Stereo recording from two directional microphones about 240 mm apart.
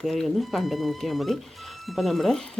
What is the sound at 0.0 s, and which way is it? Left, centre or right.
Speech, centre.